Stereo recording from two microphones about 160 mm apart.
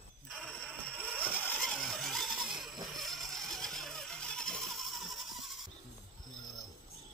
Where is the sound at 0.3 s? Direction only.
5° left (ahead or behind).